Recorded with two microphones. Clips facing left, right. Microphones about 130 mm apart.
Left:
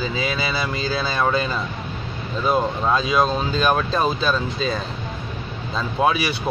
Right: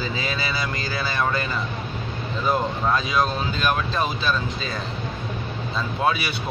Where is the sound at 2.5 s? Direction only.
20° left (ahead or behind).